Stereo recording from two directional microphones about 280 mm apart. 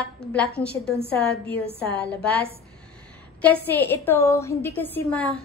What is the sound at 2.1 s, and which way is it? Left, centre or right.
Speech, centre.